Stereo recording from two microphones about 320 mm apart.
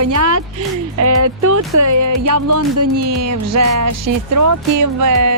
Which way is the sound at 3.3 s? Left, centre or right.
Right.